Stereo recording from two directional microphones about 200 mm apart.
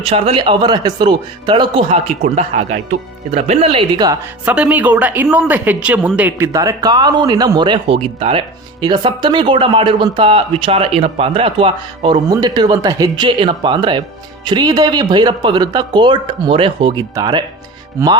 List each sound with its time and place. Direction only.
0.0 s speech: 30° right (ahead or behind)